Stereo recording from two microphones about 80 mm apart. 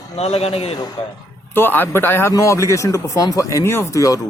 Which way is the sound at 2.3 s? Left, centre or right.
Left.